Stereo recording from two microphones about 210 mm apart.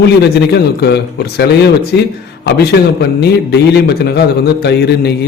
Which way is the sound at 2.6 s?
50° left (ahead or behind).